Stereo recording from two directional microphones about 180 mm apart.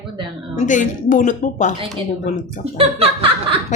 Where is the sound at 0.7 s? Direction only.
45° left (ahead or behind).